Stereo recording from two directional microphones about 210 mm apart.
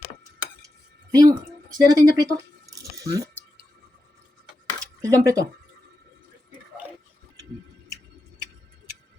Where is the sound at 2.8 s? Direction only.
15° right (ahead or behind).